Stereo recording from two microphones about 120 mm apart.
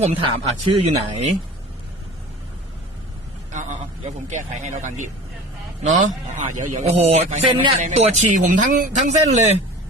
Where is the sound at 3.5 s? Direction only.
90° right; by 7.4 s 70° right (ahead or behind).